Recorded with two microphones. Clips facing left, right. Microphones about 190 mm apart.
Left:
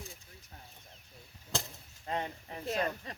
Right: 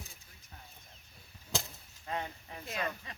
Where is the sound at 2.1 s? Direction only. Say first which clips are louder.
Left 2 dB; 30° left (ahead or behind).